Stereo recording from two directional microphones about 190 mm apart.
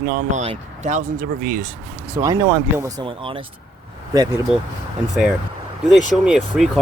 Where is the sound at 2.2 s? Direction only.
15° right (ahead or behind).